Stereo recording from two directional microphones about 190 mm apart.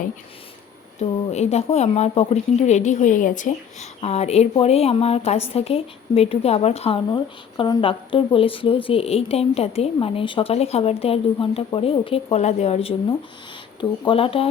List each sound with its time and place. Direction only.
0.9 s a woman's voice: 35° left (ahead or behind)